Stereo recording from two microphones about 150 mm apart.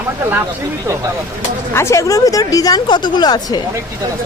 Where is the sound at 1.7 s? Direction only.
20° left (ahead or behind).